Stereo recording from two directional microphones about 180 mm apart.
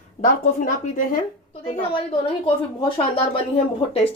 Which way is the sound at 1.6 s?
30° left (ahead or behind).